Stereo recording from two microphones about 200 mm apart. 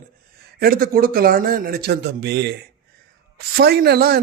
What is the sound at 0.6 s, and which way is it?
Speech, 45° right (ahead or behind).